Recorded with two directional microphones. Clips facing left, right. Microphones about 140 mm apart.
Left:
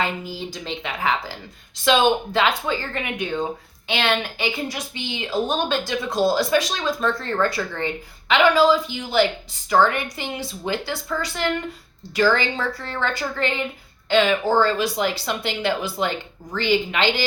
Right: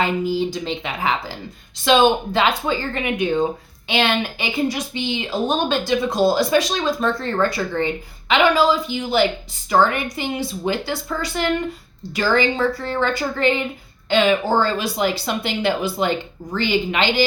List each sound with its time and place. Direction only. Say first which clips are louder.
0.0 s a woman's voice: right 7 dB; 20° right (ahead or behind)